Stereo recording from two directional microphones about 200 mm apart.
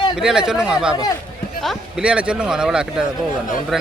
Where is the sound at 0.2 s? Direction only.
5° right (ahead or behind).